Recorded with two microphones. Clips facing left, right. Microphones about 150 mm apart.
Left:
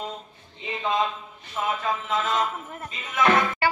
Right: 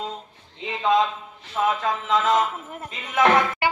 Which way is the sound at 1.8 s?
80° right.